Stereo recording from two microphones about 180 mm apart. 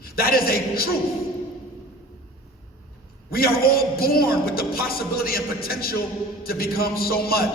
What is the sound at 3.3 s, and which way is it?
A man's voice, 55° left (ahead or behind).